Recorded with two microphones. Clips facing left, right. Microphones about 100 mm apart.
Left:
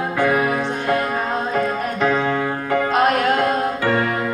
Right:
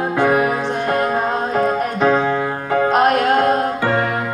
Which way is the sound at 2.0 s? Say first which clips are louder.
Right 2 dB; 25° right (ahead or behind).